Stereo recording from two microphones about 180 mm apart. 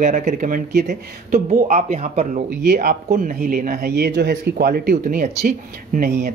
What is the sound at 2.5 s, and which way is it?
Speech, 55° right (ahead or behind).